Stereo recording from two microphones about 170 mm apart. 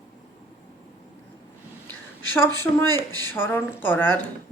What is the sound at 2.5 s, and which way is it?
Speech, 20° right (ahead or behind).